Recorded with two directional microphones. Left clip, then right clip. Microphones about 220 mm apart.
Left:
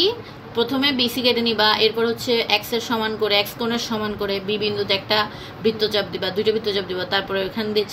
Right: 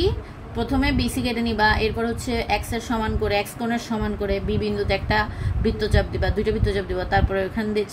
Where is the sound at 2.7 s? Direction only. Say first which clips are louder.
Left 3 dB; 30° right (ahead or behind).